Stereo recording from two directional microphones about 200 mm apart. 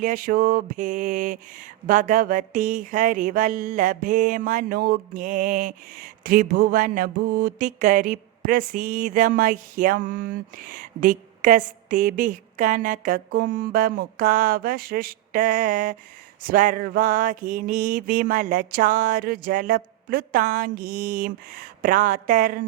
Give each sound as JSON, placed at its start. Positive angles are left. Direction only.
{"t": 0.0, "sound": "mantra", "side_deg": -40}